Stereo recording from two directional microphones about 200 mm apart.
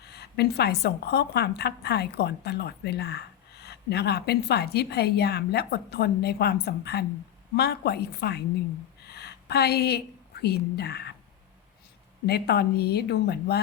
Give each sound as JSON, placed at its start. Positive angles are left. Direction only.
{"t": 0.1, "sound": "a woman's voice", "side_deg": 55}
{"t": 9.0, "sound": "a sound", "side_deg": 55}
{"t": 10.4, "sound": "a woman's voice", "side_deg": 55}
{"t": 12.2, "sound": "a woman's voice", "side_deg": 50}